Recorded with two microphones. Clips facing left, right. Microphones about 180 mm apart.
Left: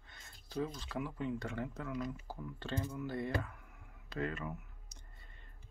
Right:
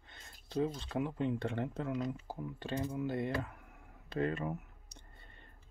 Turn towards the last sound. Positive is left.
turn(degrees=-30)  # may be behind; listen again after turning